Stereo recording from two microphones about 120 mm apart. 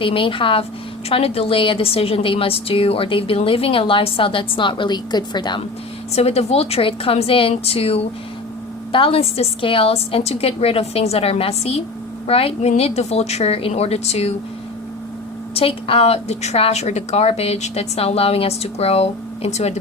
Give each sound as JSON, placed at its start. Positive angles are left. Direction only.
{"t": 0.0, "sound": "a woman's voice", "side_deg": 45}
{"t": 6.1, "sound": "a woman's voice", "side_deg": 60}
{"t": 15.5, "sound": "a woman's voice", "side_deg": 50}